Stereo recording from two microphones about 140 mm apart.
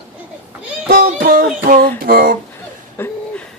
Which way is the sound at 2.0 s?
90° right.